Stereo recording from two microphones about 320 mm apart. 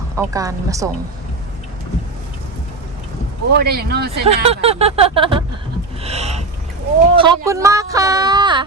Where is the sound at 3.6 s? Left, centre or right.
Right.